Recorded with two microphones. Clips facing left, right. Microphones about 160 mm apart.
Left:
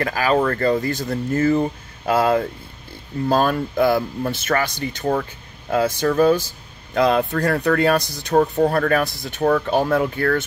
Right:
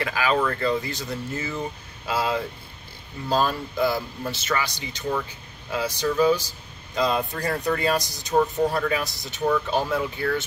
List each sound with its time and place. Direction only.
0.0 s speech: 45° left (ahead or behind)